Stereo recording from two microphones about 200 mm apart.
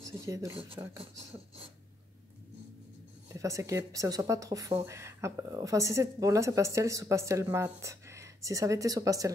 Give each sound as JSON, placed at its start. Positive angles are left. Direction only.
{"t": 0.0, "sound": "a sound", "side_deg": -15}
{"t": 0.5, "sound": "speech", "side_deg": -25}
{"t": 3.3, "sound": "a woman's voice", "side_deg": -15}